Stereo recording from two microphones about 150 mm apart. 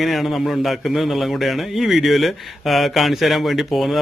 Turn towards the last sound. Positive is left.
turn(degrees=0)  # may be behind; listen again after turning